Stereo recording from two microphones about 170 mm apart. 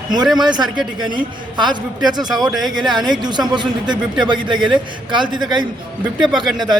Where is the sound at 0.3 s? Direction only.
25° right (ahead or behind).